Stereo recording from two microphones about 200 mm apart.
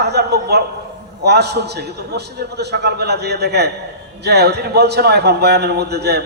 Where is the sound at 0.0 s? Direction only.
55° right (ahead or behind).